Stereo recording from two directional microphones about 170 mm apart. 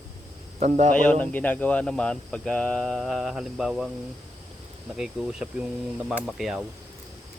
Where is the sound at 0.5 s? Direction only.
40° right (ahead or behind).